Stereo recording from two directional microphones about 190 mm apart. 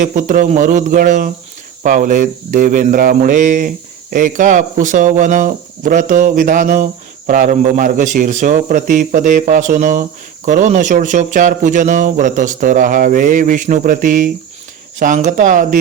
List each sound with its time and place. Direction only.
0.0 s speech: 40° right (ahead or behind)